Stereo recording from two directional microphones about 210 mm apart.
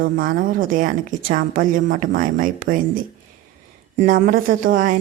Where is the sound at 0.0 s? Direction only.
40° right (ahead or behind).